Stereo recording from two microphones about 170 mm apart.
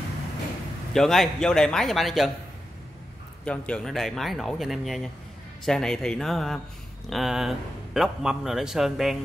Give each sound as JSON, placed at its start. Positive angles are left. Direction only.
{"t": 0.9, "sound": "a man's voice", "side_deg": 0}
{"t": 3.4, "sound": "a man's voice", "side_deg": 5}